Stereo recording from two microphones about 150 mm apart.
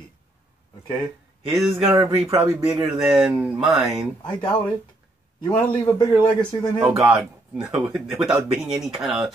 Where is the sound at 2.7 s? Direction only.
15° right (ahead or behind).